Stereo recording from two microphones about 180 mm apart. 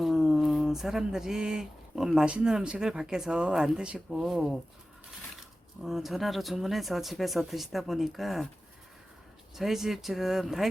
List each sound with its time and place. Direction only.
0.0 s speech: centre (ahead or behind)
5.8 s speech: centre (ahead or behind)
9.6 s speech: centre (ahead or behind)